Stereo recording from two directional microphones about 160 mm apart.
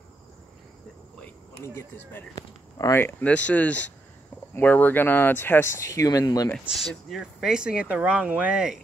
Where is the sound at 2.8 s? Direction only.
15° left (ahead or behind).